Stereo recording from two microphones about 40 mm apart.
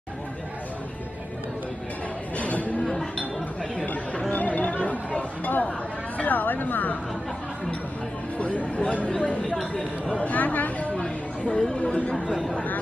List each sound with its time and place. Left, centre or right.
2.3 s music: left
3.8 s chatter: left
6.1 s a sound: left
8.4 s speech: left
11.5 s speech: centre
11.8 s speech: left